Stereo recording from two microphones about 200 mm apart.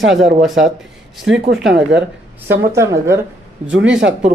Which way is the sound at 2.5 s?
15° right (ahead or behind).